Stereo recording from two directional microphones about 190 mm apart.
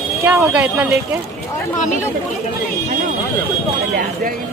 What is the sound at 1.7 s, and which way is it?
Speech, 40° left (ahead or behind).